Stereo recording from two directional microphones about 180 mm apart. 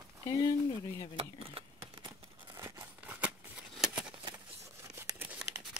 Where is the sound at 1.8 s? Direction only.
25° right (ahead or behind); by 4.0 s 5° right (ahead or behind).